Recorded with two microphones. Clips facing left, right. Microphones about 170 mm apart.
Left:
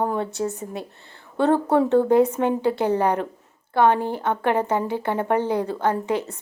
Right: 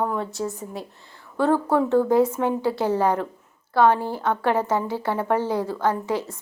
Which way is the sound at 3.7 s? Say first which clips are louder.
Even; 20° left (ahead or behind).